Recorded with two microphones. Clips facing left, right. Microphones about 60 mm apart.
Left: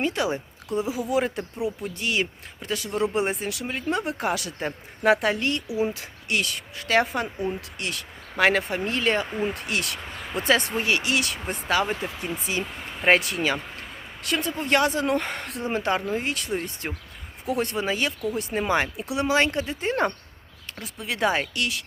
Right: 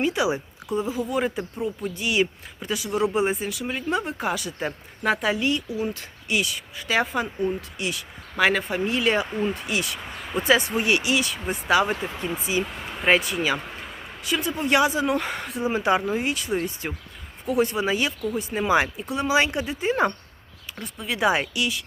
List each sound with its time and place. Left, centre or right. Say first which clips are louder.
0.0 s a woman's voice: right 2 dB; centre
0.8 s speech: left 1 dB; centre
2.0 s speech: right 4 dB; centre
5.6 s speech: left 2 dB; left
5.9 s speech: right 1 dB; centre
11.7 s speech: right 3 dB; centre
11.9 s speech: right 2 dB; centre
19.3 s speech: right 1 dB; centre
19.8 s speech: right 3 dB; centre
21.2 s speech: right 2 dB; centre